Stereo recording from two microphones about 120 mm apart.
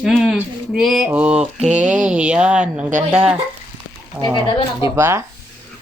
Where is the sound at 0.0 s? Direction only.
Centre (ahead or behind).